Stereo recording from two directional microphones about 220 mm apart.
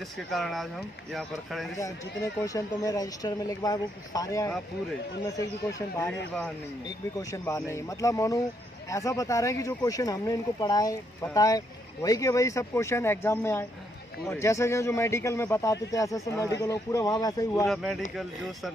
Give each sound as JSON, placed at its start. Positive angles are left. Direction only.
{"t": 0.3, "sound": "speech", "side_deg": 0}
{"t": 2.4, "sound": "speech", "side_deg": 15}
{"t": 5.7, "sound": "speech", "side_deg": 15}
{"t": 7.2, "sound": "speech", "side_deg": 15}
{"t": 17.6, "sound": "speech", "side_deg": 0}